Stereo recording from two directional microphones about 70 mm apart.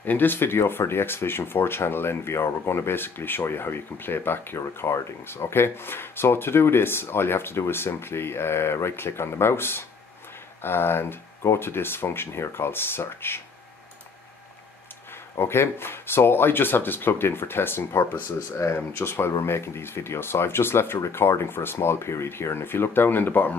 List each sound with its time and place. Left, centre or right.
0.0 s speech: left
15.3 s speech: left